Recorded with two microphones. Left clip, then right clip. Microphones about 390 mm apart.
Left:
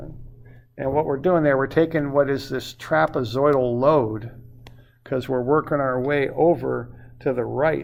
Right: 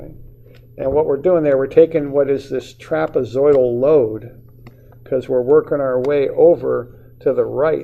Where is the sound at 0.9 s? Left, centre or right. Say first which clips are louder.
Right 5 dB; left.